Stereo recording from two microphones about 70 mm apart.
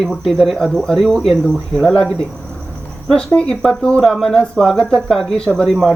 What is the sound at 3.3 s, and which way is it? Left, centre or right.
Speech, centre.